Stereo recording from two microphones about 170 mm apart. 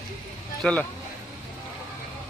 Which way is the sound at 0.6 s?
5° left (ahead or behind).